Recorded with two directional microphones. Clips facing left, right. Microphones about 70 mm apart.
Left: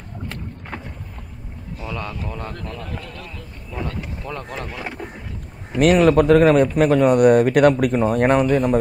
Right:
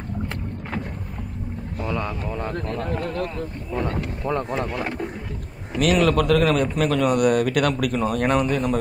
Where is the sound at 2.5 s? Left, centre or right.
Right.